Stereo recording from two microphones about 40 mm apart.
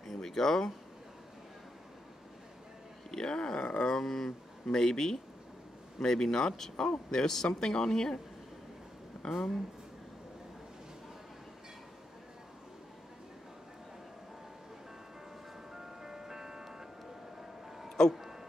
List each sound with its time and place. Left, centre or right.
0.0 s speech: centre
3.1 s speech: centre
9.1 s a sound: centre
15.7 s music: centre